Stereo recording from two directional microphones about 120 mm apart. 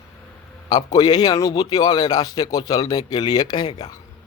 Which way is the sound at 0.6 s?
35° left (ahead or behind).